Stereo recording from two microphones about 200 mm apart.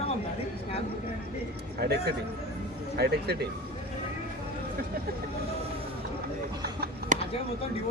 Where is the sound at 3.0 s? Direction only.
50° right (ahead or behind).